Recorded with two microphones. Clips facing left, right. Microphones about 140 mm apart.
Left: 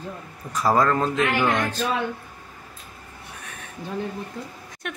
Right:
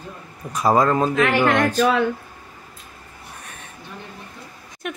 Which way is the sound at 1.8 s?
90° right.